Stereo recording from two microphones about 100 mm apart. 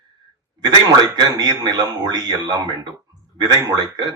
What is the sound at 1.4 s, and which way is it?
Speech, 45° right (ahead or behind).